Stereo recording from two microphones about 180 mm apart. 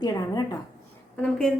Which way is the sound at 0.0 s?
20° left (ahead or behind).